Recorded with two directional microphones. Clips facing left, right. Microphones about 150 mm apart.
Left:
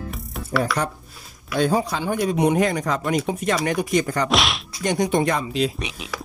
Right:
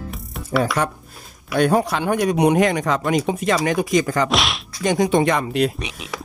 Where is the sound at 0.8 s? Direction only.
90° right.